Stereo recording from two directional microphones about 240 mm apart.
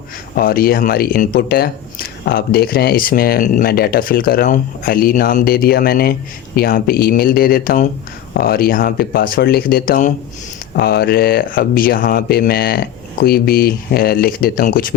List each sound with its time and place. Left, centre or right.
0.3 s speech: left